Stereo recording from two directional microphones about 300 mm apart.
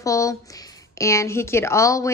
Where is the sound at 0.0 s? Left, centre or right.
Centre.